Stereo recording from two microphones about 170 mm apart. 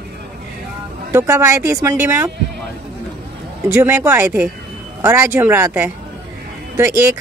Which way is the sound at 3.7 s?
15° right (ahead or behind).